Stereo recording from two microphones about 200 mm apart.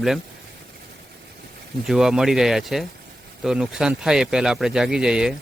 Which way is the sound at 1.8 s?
Centre (ahead or behind).